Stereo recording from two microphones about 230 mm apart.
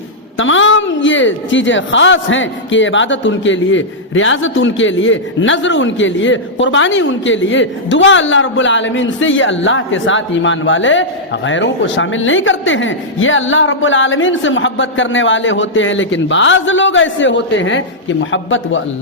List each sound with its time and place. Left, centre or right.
0.3 s a woman's voice: left